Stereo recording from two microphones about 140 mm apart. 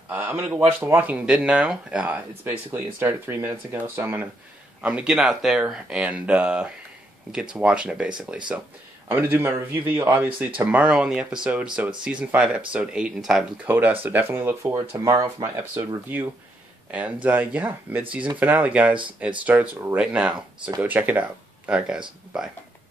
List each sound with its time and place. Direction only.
0.1 s speech: 15° right (ahead or behind)
9.1 s speech: 15° right (ahead or behind)
13.7 s speech: 15° right (ahead or behind)
16.9 s speech: 10° right (ahead or behind)